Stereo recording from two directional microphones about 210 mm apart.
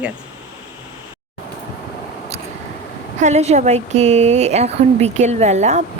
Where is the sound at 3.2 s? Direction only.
30° right (ahead or behind).